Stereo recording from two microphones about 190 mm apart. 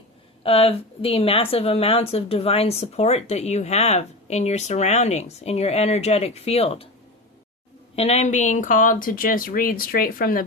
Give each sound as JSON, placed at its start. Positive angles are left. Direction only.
{"t": 0.4, "sound": "speech", "side_deg": 30}
{"t": 7.9, "sound": "speech", "side_deg": 35}